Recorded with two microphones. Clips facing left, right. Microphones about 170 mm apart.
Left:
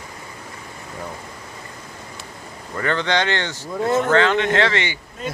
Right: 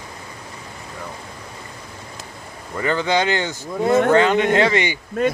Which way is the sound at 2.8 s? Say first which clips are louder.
Right 2 dB; 10° right (ahead or behind).